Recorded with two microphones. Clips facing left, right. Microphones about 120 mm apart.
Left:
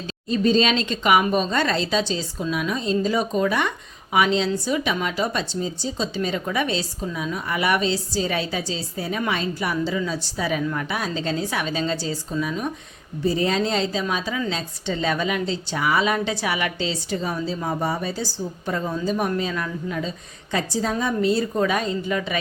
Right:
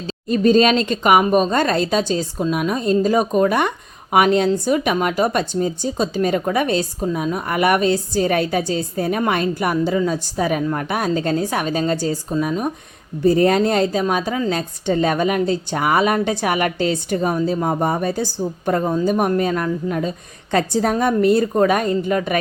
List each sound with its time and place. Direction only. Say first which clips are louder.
0.3 s a woman's voice: right 5 dB; 50° right (ahead or behind)